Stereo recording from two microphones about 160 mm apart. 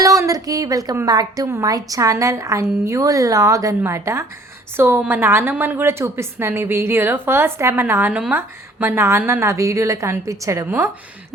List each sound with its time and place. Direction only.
0.0 s a woman's voice: 20° right (ahead or behind)